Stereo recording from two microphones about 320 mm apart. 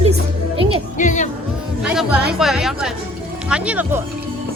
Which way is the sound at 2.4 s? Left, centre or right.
Centre.